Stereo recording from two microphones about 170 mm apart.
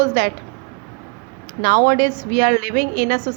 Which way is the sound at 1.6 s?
55° right (ahead or behind).